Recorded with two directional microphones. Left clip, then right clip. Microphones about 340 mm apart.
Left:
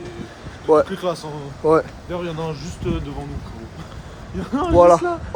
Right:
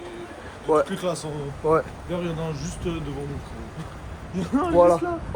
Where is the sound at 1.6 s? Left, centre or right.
Left.